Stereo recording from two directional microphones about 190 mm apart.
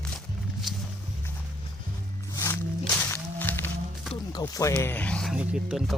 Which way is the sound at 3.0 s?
10° left (ahead or behind).